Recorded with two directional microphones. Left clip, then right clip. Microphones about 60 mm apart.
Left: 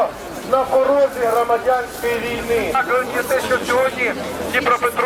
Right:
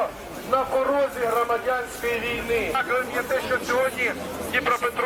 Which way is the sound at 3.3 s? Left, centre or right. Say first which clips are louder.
Left 6 dB; right.